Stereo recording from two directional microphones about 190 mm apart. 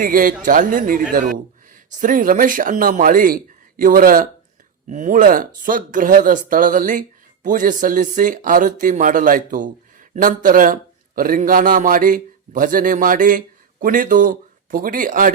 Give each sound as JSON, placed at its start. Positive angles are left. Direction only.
{"t": 0.0, "sound": "a man's voice", "side_deg": -45}